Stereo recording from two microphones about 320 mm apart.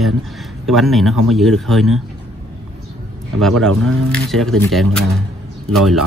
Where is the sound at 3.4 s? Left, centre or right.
Centre.